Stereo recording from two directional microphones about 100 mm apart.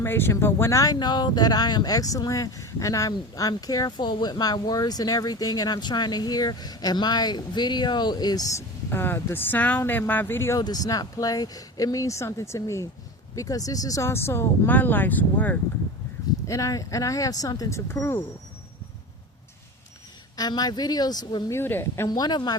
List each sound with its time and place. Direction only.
0.0 s speech: 25° left (ahead or behind)
0.9 s speech: 45° left (ahead or behind); by 10.6 s 25° left (ahead or behind)
10.6 s speech: 40° left (ahead or behind); by 15.5 s 15° left (ahead or behind)
16.5 s speech: 35° left (ahead or behind)
20.3 s speech: 40° left (ahead or behind)
21.5 s speech: 20° left (ahead or behind)
22.0 s speech: 40° left (ahead or behind)